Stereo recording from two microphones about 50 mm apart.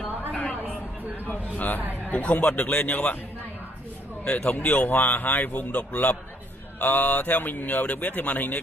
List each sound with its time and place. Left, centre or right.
0.3 s a sound: left
2.0 s speech: left
4.6 s speech: left